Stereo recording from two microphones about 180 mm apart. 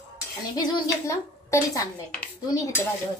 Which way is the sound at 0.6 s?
15° left (ahead or behind).